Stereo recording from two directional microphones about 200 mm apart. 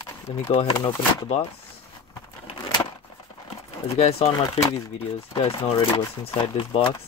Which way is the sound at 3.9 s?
30° left (ahead or behind).